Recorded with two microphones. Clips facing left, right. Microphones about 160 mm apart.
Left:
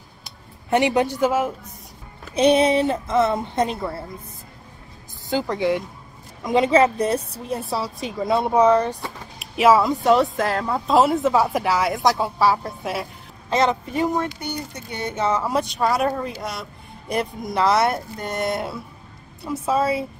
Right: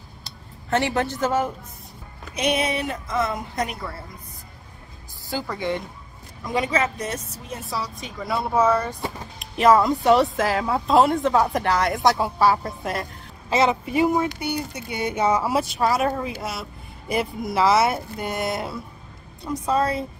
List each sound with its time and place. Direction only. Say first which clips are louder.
0.2 s a sound: even; 15° left (ahead or behind)
2.3 s speech: left 7 dB; 30° left (ahead or behind)
5.3 s a woman's voice: left 5 dB; 20° left (ahead or behind)